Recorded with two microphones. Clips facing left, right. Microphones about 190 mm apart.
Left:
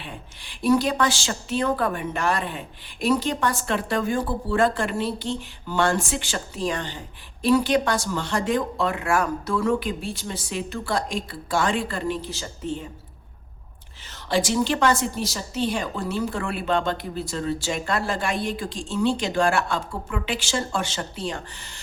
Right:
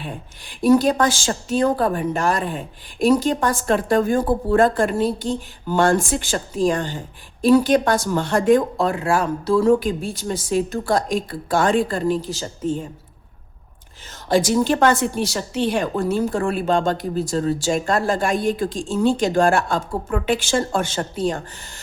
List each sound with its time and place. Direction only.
0.0 s a woman's voice: 45° right (ahead or behind)
8.9 s speech: 30° right (ahead or behind)
14.3 s a woman's voice: 45° right (ahead or behind)